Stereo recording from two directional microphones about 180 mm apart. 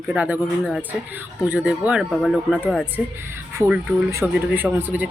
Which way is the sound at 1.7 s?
5° right (ahead or behind).